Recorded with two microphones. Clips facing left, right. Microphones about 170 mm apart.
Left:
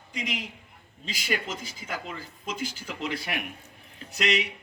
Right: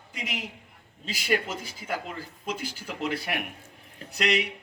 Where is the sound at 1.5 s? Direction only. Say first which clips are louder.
Right 3 dB; 55° right (ahead or behind).